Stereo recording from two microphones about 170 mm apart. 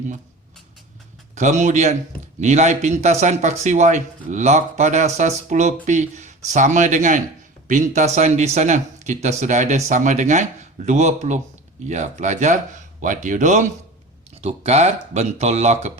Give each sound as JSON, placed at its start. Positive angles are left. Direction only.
{"t": 1.4, "sound": "speech", "side_deg": -45}